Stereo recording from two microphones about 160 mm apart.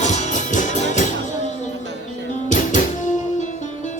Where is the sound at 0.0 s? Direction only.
45° left (ahead or behind).